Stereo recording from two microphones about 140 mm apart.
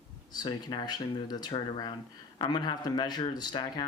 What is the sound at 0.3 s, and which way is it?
Speech, 30° left (ahead or behind).